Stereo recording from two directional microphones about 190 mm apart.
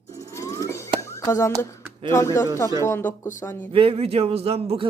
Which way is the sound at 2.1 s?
15° left (ahead or behind).